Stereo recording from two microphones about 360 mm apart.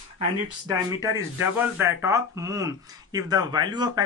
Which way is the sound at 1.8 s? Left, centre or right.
Centre.